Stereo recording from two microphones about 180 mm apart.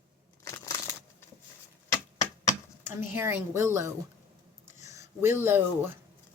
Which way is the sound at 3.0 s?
15° right (ahead or behind).